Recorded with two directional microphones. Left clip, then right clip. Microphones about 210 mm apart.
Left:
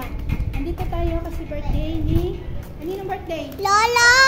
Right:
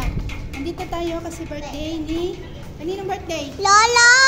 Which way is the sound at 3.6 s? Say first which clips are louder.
Right 2 dB; 10° right (ahead or behind).